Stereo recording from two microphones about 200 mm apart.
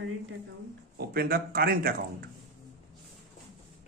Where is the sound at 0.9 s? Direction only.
50° right (ahead or behind).